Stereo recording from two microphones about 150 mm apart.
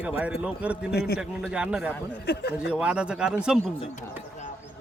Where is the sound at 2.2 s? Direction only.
90° left.